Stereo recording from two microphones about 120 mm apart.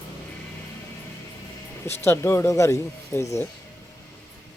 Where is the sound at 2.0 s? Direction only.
20° left (ahead or behind).